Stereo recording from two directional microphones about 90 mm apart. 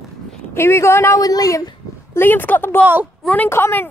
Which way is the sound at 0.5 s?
30° left (ahead or behind).